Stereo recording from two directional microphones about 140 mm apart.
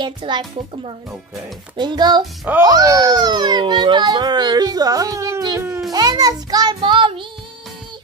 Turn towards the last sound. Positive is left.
turn(degrees=-35)  # may be behind; listen again after turning